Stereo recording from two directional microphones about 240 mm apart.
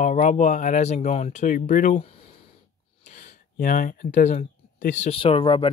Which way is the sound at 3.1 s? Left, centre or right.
Left.